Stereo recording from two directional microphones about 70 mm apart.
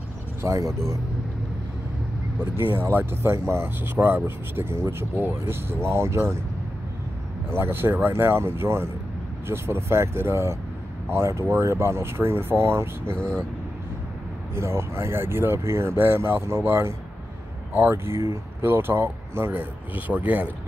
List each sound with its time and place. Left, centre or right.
0.4 s speech: right
2.5 s speech: right
7.5 s speech: right
13.2 s speech: centre
14.5 s speech: right